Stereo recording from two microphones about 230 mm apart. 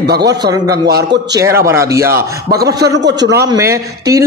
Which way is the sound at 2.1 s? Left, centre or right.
Right.